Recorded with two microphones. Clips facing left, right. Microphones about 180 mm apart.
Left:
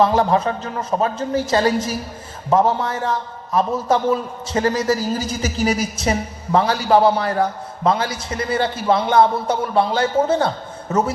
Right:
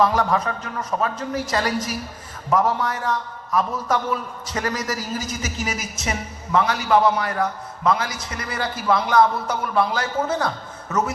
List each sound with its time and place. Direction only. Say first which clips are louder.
0.0 s a man's voice: left 4 dB; 25° left (ahead or behind)